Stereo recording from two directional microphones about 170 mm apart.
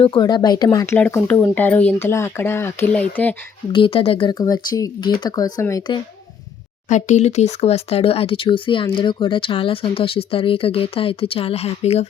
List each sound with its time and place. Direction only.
0.0 s speech: 25° left (ahead or behind)
0.9 s speech: 10° left (ahead or behind)
3.7 s speech: 30° left (ahead or behind)
6.8 s speech: 45° left (ahead or behind)